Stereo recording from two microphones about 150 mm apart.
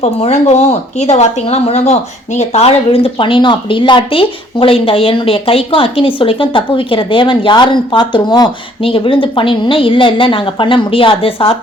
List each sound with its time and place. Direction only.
0.0 s speech: 45° left (ahead or behind)